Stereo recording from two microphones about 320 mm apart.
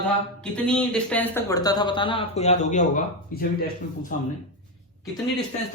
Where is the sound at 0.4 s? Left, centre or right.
Centre; by 3.7 s left.